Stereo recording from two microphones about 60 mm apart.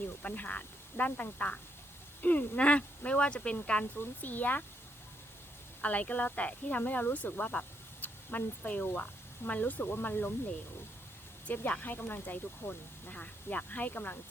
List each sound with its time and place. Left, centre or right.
0.2 s speech: left
3.9 s speech: left
5.8 s speech: left
11.4 s speech: left